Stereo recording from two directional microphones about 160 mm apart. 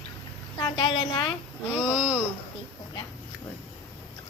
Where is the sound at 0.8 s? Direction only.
30° left (ahead or behind).